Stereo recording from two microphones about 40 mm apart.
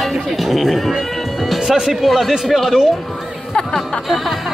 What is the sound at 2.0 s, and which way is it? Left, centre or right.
Speech, centre.